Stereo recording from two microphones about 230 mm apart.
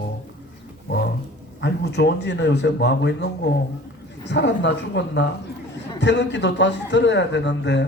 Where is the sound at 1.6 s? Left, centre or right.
Left.